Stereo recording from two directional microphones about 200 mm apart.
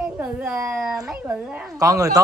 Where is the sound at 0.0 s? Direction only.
5° right (ahead or behind).